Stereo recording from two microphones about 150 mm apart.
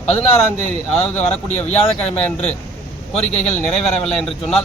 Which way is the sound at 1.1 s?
50° left (ahead or behind).